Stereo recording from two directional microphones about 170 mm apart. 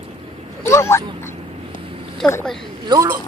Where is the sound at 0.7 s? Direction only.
15° left (ahead or behind).